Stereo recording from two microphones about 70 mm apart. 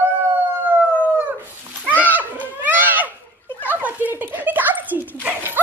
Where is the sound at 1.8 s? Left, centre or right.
Right.